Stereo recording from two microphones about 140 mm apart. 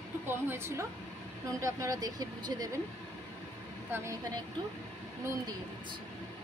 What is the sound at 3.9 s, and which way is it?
Speech, 15° right (ahead or behind).